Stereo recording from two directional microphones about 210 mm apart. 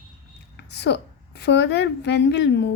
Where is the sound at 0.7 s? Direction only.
55° left (ahead or behind).